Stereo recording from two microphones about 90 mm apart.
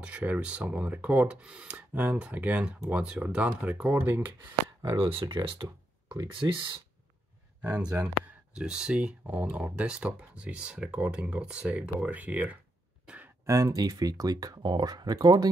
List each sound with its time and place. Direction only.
0.0 s speech: 15° right (ahead or behind)
4.8 s speech: 80° right; by 6.8 s 65° right (ahead or behind)
7.6 s speech: 45° right (ahead or behind)
8.5 s speech: 10° right (ahead or behind)
13.0 s a sound: 15° right (ahead or behind)
13.5 s speech: 35° right (ahead or behind)